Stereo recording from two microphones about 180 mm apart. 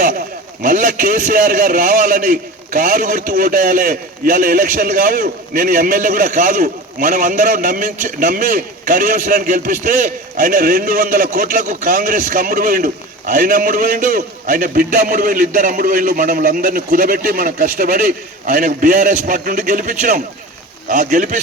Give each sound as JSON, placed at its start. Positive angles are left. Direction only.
{"t": 0.6, "sound": "a man's voice", "side_deg": -50}